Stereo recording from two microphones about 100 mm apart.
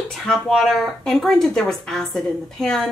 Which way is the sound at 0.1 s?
5° left (ahead or behind).